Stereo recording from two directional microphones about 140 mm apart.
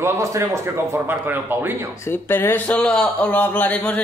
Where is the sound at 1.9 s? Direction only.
15° left (ahead or behind).